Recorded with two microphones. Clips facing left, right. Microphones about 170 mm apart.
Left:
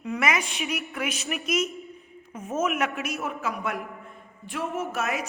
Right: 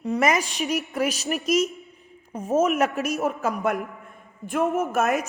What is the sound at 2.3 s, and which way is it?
A woman's voice, 35° right (ahead or behind).